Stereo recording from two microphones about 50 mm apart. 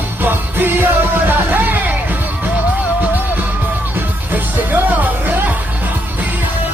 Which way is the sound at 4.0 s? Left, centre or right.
Right.